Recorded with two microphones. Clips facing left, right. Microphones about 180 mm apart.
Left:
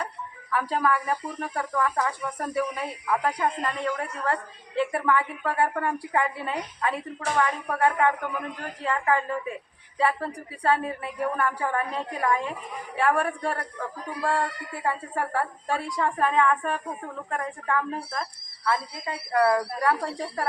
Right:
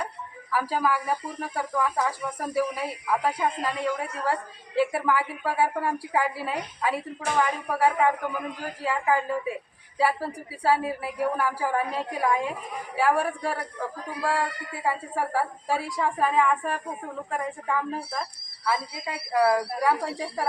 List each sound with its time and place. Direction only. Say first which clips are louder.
0.5 s speech: even; 5° right (ahead or behind)